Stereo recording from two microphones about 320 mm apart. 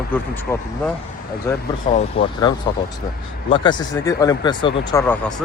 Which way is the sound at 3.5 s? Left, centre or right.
Centre.